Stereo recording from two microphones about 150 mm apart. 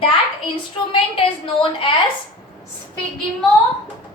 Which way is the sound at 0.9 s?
35° left (ahead or behind).